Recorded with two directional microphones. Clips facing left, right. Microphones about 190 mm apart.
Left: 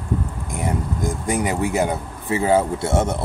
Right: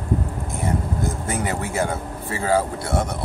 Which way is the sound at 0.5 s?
15° left (ahead or behind).